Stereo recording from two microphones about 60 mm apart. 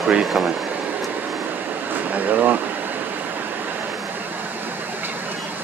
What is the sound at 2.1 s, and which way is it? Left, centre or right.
Speech, right.